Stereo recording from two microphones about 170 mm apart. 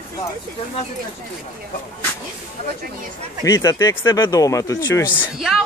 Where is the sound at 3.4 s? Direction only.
20° left (ahead or behind).